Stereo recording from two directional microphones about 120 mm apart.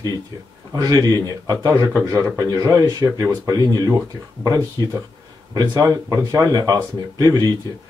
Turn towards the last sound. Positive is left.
turn(degrees=-30)  # may be behind; listen again after turning